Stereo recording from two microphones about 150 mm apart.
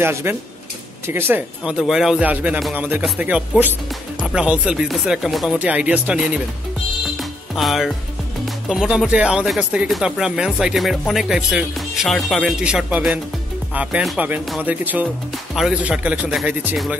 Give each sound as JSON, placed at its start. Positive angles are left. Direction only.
{"t": 0.0, "sound": "speech", "side_deg": -15}
{"t": 1.6, "sound": "speech", "side_deg": -5}
{"t": 7.2, "sound": "music", "side_deg": 0}
{"t": 8.6, "sound": "speech", "side_deg": -5}